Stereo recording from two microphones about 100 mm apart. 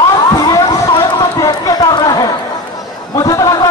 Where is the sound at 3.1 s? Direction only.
35° left (ahead or behind).